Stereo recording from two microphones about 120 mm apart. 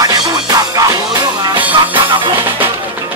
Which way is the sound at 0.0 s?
30° right (ahead or behind).